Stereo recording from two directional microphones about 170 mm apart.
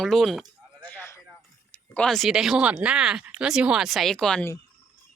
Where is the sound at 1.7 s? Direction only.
5° left (ahead or behind).